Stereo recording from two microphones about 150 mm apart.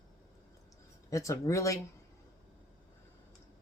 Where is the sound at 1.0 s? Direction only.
20° left (ahead or behind).